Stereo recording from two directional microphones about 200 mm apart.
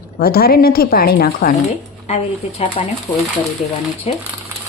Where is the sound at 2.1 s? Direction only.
30° left (ahead or behind).